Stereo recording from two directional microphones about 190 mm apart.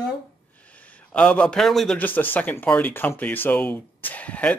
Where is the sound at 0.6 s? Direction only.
5° left (ahead or behind).